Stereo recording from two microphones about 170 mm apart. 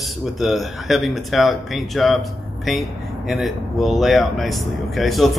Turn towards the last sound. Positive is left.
turn(degrees=0)  # may be behind; listen again after turning